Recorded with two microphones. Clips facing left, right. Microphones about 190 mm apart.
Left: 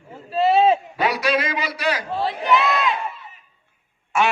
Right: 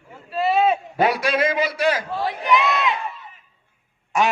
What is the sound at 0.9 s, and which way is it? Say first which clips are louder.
A man's voice: right 1 dB; 50° right (ahead or behind).